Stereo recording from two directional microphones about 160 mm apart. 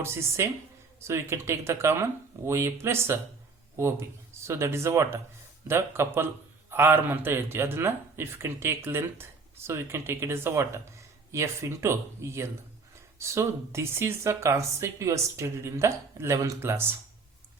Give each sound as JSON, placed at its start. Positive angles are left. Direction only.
{"t": 0.0, "sound": "a man's voice", "side_deg": -15}